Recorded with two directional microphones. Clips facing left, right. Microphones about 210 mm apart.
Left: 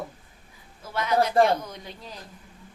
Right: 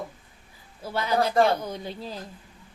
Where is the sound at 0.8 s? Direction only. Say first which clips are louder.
Left 1 dB; 30° right (ahead or behind).